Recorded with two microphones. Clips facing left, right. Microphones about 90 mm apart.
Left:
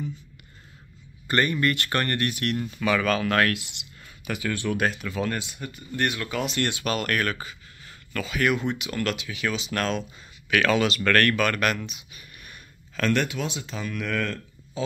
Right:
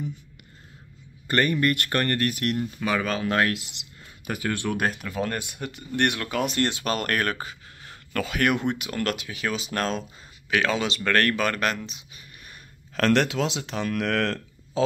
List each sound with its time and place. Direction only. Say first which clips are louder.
1.5 s speech: right 1 dB; 50° right (ahead or behind)
2.4 s speech: even; 35° right (ahead or behind)
6.6 s speech: right 1 dB; 35° right (ahead or behind)
7.4 s speech: right 2 dB; 55° right (ahead or behind); by 10.0 s 35° right (ahead or behind)
10.5 s speech: left 2 dB; 20° right (ahead or behind)
12.9 s speech: right 3 dB; 75° right (ahead or behind)